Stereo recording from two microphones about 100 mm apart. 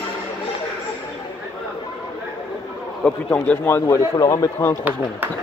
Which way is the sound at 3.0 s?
10° left (ahead or behind).